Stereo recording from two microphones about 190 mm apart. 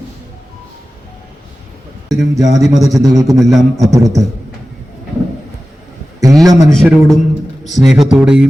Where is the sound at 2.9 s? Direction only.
20° right (ahead or behind).